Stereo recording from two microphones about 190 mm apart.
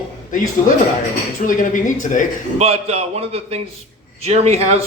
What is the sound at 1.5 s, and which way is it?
Speech, 45° left (ahead or behind).